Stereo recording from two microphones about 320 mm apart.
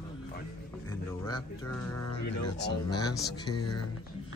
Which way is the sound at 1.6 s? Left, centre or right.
Left.